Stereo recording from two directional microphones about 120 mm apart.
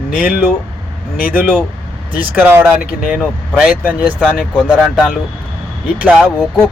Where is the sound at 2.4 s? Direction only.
20° right (ahead or behind).